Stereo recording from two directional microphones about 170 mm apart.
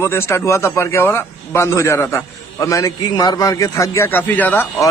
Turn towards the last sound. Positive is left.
turn(degrees=10)  # may be behind; listen again after turning